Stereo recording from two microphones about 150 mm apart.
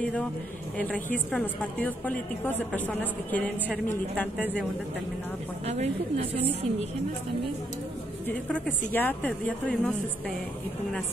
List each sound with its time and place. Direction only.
0.0 s a woman's voice: 10° left (ahead or behind)
5.7 s a woman's voice: 45° right (ahead or behind)
8.3 s a woman's voice: 10° left (ahead or behind)